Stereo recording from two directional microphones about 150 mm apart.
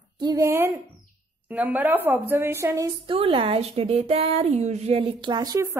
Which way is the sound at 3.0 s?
40° right (ahead or behind).